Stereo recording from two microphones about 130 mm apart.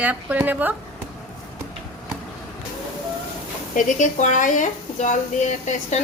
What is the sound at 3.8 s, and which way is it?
Speech, 75° left (ahead or behind).